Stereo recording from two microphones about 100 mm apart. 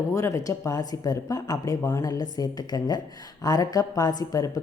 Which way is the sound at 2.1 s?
40° left (ahead or behind).